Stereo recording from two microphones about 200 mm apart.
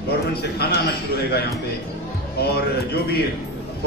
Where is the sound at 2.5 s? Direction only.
50° left (ahead or behind).